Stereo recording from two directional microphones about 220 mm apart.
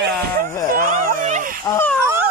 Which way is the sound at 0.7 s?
40° right (ahead or behind).